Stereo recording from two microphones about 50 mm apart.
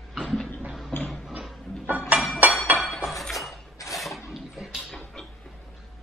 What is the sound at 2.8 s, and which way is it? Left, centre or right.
Chink, centre.